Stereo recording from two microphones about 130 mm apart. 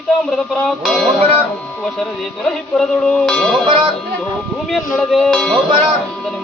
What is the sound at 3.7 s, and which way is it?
Speech, 35° right (ahead or behind).